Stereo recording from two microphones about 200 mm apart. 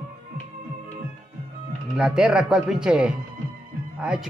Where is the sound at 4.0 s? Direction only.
5° right (ahead or behind).